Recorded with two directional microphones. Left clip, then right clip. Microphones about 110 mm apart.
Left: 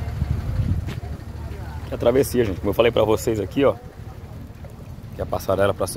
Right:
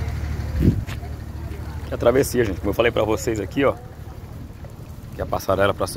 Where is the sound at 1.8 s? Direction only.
30° left (ahead or behind).